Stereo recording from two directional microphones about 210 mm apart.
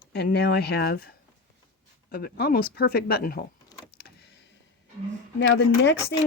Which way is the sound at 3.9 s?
50° left (ahead or behind).